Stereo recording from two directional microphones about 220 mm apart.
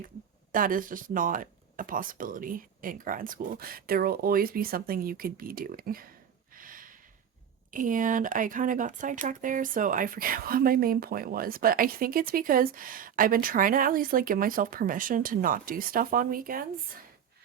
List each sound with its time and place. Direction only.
0.5 s speech: 40° right (ahead or behind)
6.5 s a sound: 40° right (ahead or behind)
7.7 s speech: 35° right (ahead or behind)